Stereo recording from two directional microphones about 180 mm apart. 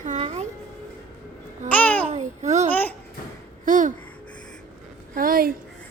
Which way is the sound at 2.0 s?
40° right (ahead or behind).